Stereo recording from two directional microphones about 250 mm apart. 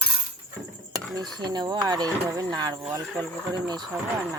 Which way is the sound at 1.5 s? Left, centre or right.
Centre.